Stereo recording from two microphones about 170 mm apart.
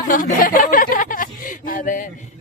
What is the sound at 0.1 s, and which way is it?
Speech, 50° left (ahead or behind).